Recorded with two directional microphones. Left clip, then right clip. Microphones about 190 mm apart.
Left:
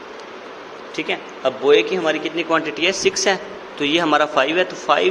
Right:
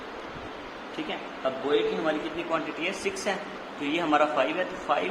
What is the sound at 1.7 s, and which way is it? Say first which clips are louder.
A man's voice: left 11 dB; 35° left (ahead or behind).